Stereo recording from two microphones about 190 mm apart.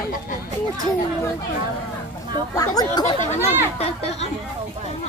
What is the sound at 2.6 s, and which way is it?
Speech, 20° left (ahead or behind).